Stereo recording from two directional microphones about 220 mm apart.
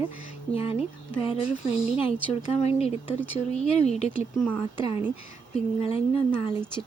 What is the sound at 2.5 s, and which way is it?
Speech, 30° left (ahead or behind).